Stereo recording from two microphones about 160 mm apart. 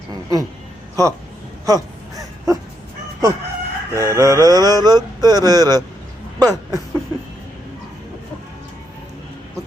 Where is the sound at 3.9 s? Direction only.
20° right (ahead or behind).